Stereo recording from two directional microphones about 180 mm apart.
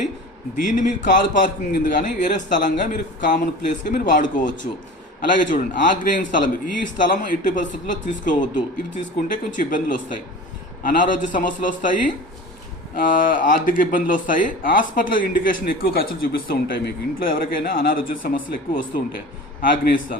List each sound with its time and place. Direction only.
0.5 s speech: 45° left (ahead or behind)